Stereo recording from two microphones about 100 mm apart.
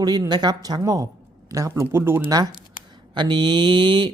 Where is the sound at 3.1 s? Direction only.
50° right (ahead or behind).